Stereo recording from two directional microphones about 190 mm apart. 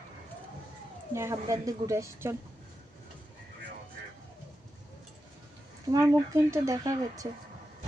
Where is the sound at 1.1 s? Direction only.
15° right (ahead or behind).